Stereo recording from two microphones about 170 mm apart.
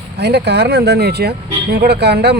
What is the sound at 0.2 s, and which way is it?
Speech, 75° right (ahead or behind).